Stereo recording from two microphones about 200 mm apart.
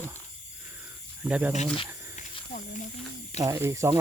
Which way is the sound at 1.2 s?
5° right (ahead or behind).